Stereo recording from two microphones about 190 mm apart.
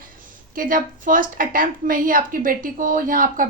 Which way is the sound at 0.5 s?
45° right (ahead or behind).